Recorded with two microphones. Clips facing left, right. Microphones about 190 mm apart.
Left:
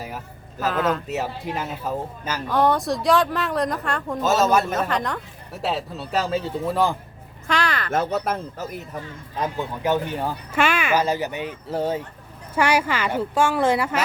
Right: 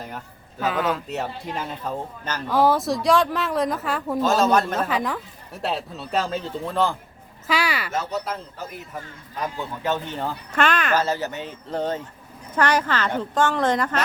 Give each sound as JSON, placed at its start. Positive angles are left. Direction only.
{"t": 0.6, "sound": "speech", "side_deg": 0}
{"t": 2.5, "sound": "speech", "side_deg": -5}
{"t": 4.9, "sound": "speech", "side_deg": -5}
{"t": 7.4, "sound": "a sound", "side_deg": -5}
{"t": 7.9, "sound": "speech", "side_deg": 55}
{"t": 9.4, "sound": "speech", "side_deg": 15}